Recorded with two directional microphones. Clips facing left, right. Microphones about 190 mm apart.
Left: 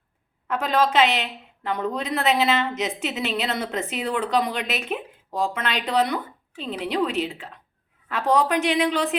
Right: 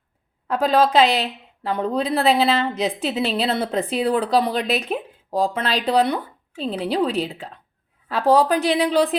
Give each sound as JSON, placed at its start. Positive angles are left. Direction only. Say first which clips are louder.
{"t": 0.4, "sound": "a woman's voice", "louder": "right 4 dB", "side_deg": -35}